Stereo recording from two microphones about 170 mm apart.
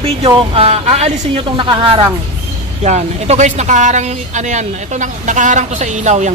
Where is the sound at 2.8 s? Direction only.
40° right (ahead or behind).